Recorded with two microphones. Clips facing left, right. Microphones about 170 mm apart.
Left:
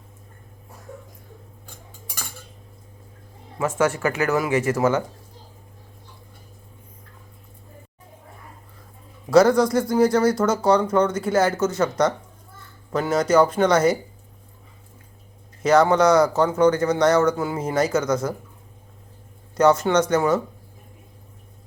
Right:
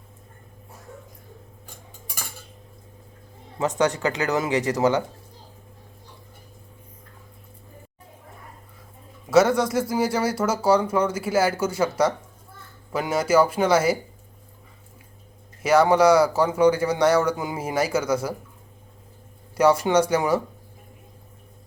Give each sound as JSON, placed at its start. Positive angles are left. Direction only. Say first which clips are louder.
{"t": 3.6, "sound": "speech", "louder": "left 1 dB", "side_deg": -20}
{"t": 9.3, "sound": "speech", "louder": "left 3 dB", "side_deg": -5}
{"t": 15.6, "sound": "speech", "louder": "even", "side_deg": -10}
{"t": 19.5, "sound": "speech", "louder": "left 1 dB", "side_deg": -10}